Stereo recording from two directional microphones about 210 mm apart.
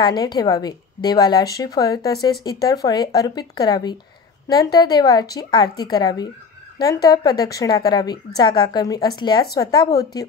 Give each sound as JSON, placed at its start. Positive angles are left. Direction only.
{"t": 0.0, "sound": "a woman's voice", "side_deg": 20}